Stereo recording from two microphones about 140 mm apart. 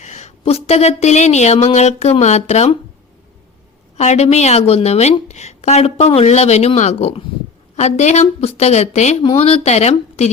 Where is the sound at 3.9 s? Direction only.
55° left (ahead or behind).